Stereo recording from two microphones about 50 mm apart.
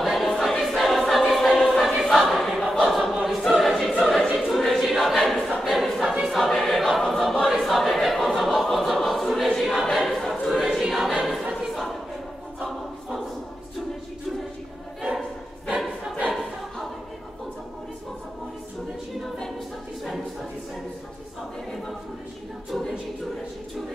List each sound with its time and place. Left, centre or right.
0.0 s choir: centre
4.4 s a sound: centre
5.6 s choir: centre
16.3 s choir: centre